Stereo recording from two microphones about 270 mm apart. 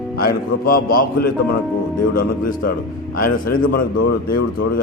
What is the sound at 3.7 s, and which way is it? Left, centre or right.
Speech, left.